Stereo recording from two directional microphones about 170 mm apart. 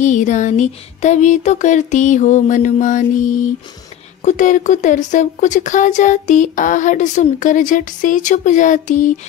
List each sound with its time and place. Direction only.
0.0 s speech: 45° left (ahead or behind)